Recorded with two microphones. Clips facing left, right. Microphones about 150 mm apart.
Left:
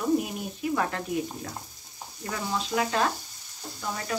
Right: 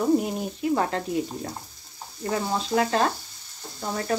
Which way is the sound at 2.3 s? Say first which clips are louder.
Right 5 dB; 40° right (ahead or behind).